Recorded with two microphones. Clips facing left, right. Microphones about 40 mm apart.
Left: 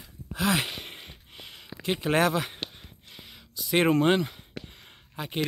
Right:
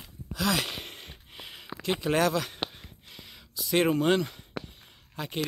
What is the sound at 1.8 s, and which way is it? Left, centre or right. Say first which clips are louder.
Speech: left 1 dB; left.